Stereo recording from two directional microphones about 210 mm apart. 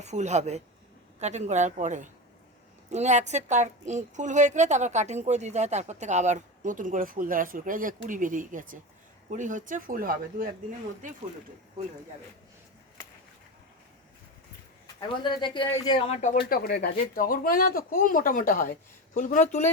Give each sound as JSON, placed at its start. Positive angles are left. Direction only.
{"t": 0.0, "sound": "a woman's voice", "side_deg": -35}
{"t": 15.2, "sound": "speech", "side_deg": 20}
{"t": 16.4, "sound": "speech", "side_deg": 45}